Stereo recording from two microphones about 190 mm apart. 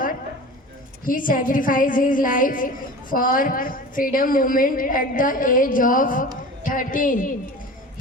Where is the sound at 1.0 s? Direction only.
45° left (ahead or behind).